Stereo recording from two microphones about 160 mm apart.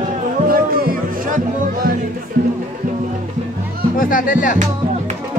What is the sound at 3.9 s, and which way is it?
Speech, 55° left (ahead or behind).